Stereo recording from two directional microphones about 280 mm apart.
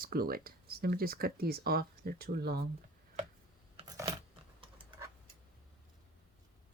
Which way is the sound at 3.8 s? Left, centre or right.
Centre.